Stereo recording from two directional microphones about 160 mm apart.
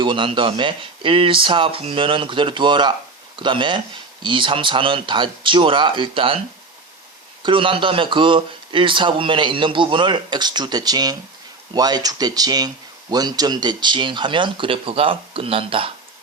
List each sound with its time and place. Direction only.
0.0 s a man's voice: 30° right (ahead or behind)
7.4 s a man's voice: 30° right (ahead or behind)